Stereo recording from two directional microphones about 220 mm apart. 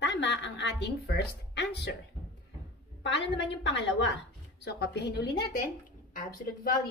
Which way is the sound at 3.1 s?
55° left (ahead or behind).